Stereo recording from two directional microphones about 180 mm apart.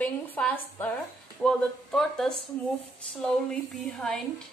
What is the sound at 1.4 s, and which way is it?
A woman's voice, 5° left (ahead or behind).